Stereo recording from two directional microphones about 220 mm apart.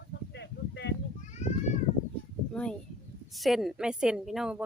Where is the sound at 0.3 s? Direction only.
50° left (ahead or behind).